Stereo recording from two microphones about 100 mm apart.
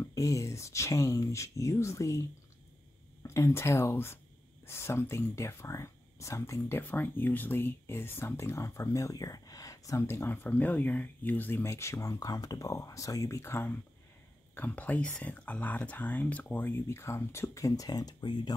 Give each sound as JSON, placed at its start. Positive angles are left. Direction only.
{"t": 0.0, "sound": "speech", "side_deg": 30}